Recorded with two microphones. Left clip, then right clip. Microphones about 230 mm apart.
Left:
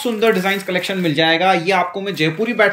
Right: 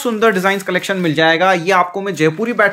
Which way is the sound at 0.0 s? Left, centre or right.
Centre.